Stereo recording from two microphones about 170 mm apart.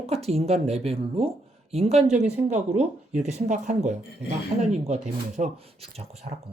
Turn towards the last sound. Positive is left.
turn(degrees=-40)  # may be behind; listen again after turning